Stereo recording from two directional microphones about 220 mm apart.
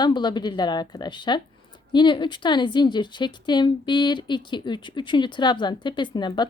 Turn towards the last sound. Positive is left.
turn(degrees=20)  # may be behind; listen again after turning